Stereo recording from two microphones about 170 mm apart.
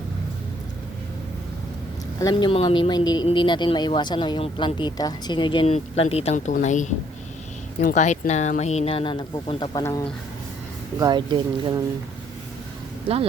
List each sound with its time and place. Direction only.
2.3 s speech: 30° left (ahead or behind)
11.0 s speech: 25° right (ahead or behind)